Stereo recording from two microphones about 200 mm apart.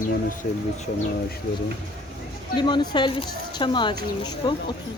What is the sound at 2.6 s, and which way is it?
A woman's voice, 20° left (ahead or behind).